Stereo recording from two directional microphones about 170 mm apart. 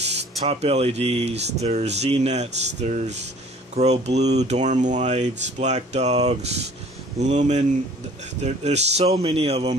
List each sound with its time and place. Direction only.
0.5 s speech: 40° right (ahead or behind)